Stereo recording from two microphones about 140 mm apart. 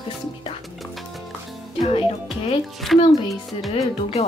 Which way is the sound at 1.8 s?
40° left (ahead or behind).